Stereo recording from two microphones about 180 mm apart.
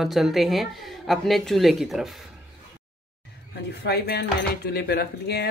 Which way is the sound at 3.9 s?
65° left (ahead or behind).